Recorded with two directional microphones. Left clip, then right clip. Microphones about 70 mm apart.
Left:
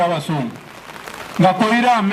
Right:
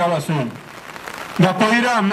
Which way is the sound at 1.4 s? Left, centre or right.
Left.